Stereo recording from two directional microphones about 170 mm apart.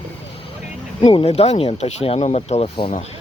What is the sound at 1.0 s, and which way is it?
Speech, 35° left (ahead or behind).